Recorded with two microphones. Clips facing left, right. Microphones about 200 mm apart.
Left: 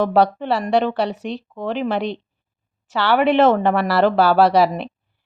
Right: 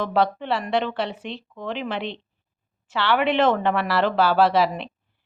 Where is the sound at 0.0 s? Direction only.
45° left (ahead or behind).